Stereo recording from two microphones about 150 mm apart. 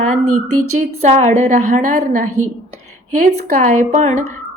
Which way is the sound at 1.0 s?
50° right (ahead or behind).